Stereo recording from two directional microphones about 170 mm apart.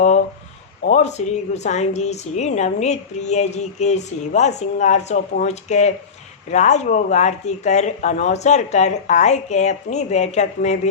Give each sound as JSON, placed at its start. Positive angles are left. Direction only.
{"t": 0.9, "sound": "a woman's voice", "side_deg": 40}